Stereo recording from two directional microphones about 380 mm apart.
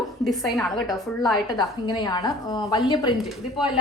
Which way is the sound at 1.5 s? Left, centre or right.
Centre.